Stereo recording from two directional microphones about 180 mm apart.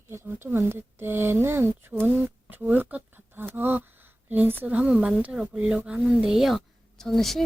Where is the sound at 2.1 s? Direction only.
10° right (ahead or behind).